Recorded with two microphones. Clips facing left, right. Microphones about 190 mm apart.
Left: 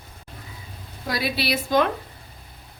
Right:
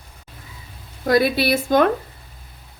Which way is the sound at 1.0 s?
50° right (ahead or behind).